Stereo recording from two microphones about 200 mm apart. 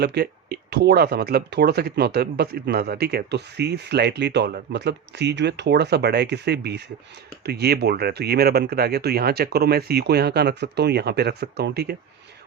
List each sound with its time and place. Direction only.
0.0 s speech: 55° right (ahead or behind)